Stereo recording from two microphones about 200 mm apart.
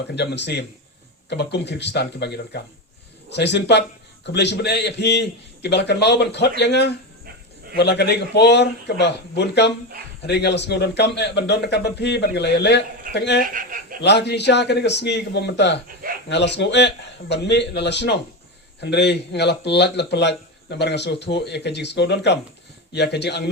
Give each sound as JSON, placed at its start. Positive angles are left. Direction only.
{"t": 0.2, "sound": "speech", "side_deg": 60}
{"t": 13.5, "sound": "speech", "side_deg": -40}
{"t": 14.0, "sound": "speech", "side_deg": 60}